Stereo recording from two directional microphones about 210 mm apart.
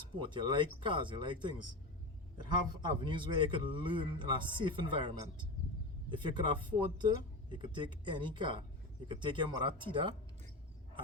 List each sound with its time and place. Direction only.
0.2 s speech: 20° right (ahead or behind)
3.0 s speech: 25° right (ahead or behind)